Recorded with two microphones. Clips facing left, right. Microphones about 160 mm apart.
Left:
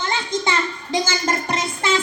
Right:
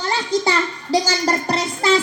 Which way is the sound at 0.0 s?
35° right (ahead or behind).